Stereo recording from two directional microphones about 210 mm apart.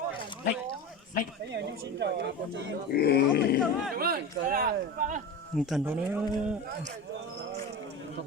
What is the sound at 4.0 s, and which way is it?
Speech, 45° right (ahead or behind).